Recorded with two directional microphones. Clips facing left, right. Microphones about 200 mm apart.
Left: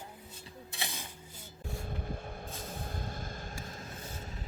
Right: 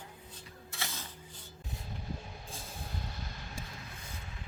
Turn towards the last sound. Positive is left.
turn(degrees=40)  # may be behind; listen again after turning